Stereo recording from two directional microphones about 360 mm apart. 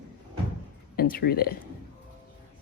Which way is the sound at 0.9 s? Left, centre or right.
Left.